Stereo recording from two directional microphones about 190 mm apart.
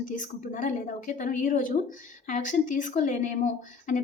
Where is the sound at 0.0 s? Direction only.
40° left (ahead or behind).